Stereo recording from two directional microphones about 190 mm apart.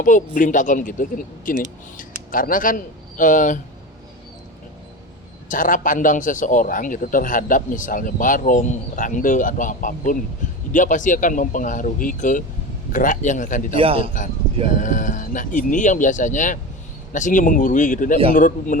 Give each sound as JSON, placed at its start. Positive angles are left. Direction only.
{"t": 0.0, "sound": "a man's voice", "side_deg": 45}
{"t": 5.5, "sound": "a man's voice", "side_deg": 45}
{"t": 13.7, "sound": "a man's voice", "side_deg": -30}
{"t": 14.0, "sound": "a man's voice", "side_deg": 40}